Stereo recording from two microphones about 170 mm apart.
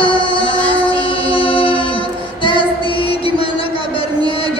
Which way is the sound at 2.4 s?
30° left (ahead or behind).